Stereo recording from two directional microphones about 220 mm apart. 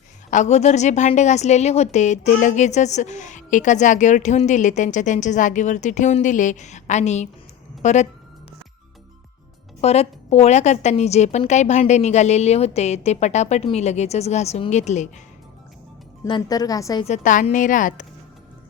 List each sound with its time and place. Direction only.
0.3 s a woman's voice: 30° left (ahead or behind)
9.8 s a woman's voice: 30° left (ahead or behind)
16.2 s a woman's voice: 20° left (ahead or behind)
17.1 s a woman's voice: 35° left (ahead or behind)